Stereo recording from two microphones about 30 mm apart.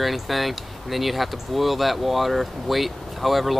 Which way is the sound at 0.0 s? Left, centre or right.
Centre.